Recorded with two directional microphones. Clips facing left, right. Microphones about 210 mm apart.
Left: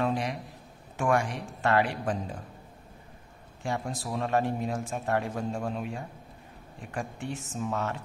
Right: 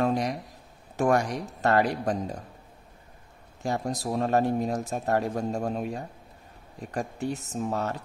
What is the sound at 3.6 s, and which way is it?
Speech, 40° right (ahead or behind).